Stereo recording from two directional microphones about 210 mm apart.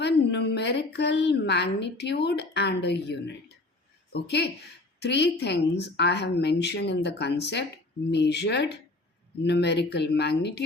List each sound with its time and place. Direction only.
0.0 s a woman's voice: 55° left (ahead or behind)